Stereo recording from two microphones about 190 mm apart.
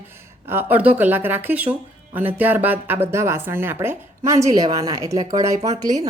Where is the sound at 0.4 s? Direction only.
10° right (ahead or behind).